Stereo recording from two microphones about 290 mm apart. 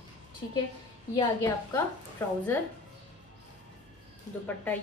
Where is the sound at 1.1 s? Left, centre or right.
Centre.